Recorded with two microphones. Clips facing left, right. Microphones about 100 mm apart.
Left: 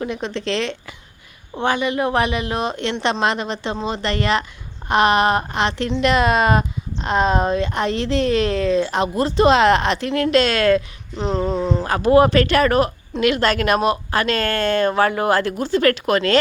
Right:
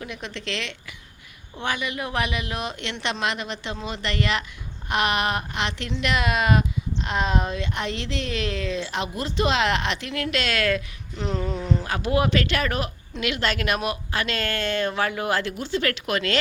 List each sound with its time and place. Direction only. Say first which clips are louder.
0.0 s speech: left 9 dB; 35° left (ahead or behind)
11.9 s speech: left 11 dB; 40° left (ahead or behind)